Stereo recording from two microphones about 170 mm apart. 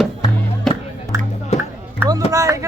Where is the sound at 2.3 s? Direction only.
20° right (ahead or behind).